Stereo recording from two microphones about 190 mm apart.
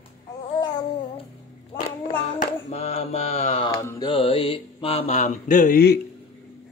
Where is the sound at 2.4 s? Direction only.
35° left (ahead or behind); by 6.0 s 55° left (ahead or behind).